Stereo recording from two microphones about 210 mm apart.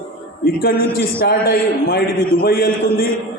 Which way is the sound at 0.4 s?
45° left (ahead or behind).